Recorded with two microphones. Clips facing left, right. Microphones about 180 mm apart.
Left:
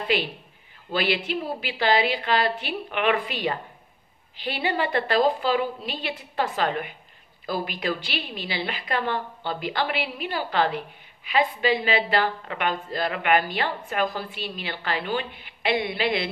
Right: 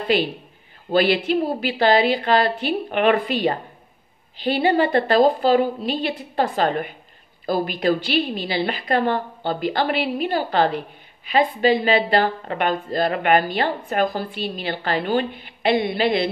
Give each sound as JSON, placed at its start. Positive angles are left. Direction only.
{"t": 0.0, "sound": "a man's voice", "side_deg": -35}
{"t": 4.5, "sound": "a woman's voice", "side_deg": -40}